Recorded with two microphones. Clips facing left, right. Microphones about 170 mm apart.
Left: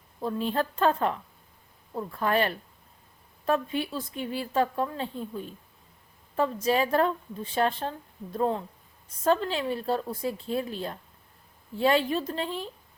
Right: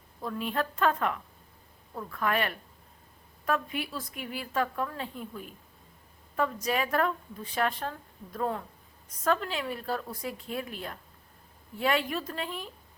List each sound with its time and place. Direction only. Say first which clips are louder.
0.2 s a woman's voice: left 4 dB; 30° left (ahead or behind)